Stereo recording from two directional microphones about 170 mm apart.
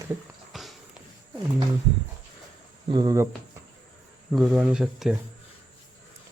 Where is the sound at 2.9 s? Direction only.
25° right (ahead or behind).